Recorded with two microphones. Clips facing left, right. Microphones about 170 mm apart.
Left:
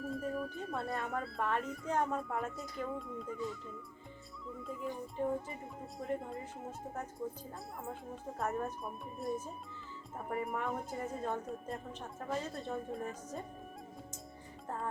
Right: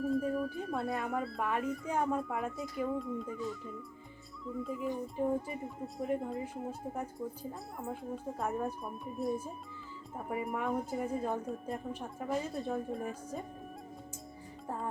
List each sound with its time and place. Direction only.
0.0 s speech: centre (ahead or behind)
4.4 s speech: centre (ahead or behind)